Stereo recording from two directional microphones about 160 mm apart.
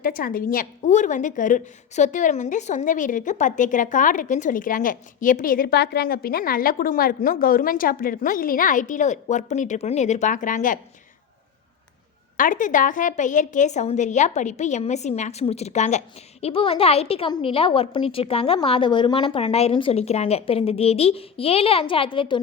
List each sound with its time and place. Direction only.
0.0 s a woman's voice: 65° left (ahead or behind)
12.4 s a woman's voice: 55° left (ahead or behind); by 22.4 s 35° left (ahead or behind)